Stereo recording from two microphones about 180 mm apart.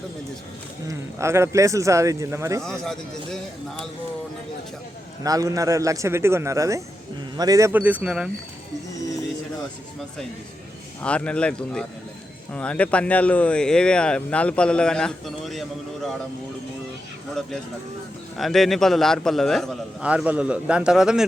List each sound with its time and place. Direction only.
0.9 s speech: 15° right (ahead or behind)
2.8 s speech: centre (ahead or behind)
5.2 s speech: 20° right (ahead or behind)
11.0 s speech: 5° left (ahead or behind)
18.3 s speech: centre (ahead or behind)